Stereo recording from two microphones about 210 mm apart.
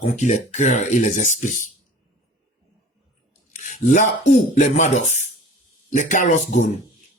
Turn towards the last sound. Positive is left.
turn(degrees=35)  # may be behind; listen again after turning